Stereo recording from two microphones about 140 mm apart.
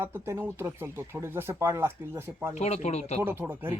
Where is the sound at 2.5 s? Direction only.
50° left (ahead or behind).